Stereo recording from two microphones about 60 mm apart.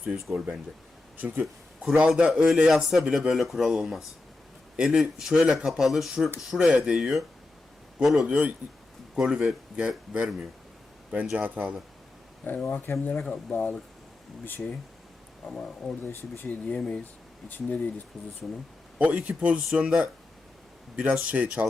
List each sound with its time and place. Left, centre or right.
0.0 s a man's voice: centre
1.1 s speech: right
1.8 s a man's voice: centre
2.6 s a man's voice: centre
6.7 s a man's voice: centre
8.3 s speech: right
9.1 s a man's voice: centre
11.3 s speech: right
12.6 s speech: left
13.1 s speech: centre
15.5 s speech: centre
16.6 s speech: centre
18.4 s speech: centre
18.9 s speech: right